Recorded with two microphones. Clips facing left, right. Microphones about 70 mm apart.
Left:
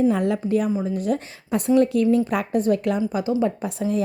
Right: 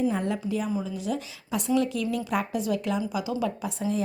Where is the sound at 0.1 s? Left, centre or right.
Left.